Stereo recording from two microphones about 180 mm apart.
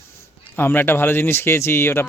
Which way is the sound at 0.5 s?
10° left (ahead or behind).